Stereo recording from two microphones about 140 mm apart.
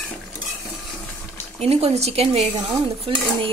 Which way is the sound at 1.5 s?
45° right (ahead or behind).